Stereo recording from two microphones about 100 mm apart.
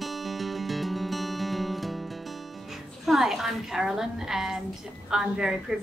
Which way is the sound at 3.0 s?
5° right (ahead or behind).